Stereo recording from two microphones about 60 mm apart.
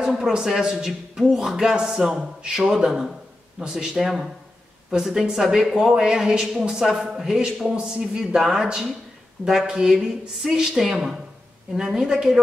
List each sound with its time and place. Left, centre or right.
0.0 s a man's voice: centre